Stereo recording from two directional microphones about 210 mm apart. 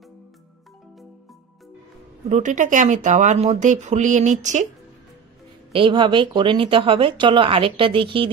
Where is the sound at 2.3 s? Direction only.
35° right (ahead or behind).